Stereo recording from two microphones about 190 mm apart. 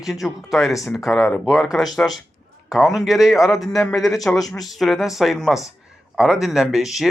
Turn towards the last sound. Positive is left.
turn(degrees=0)  # may be behind; listen again after turning